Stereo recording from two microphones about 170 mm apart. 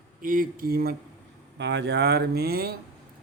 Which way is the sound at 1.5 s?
90° right.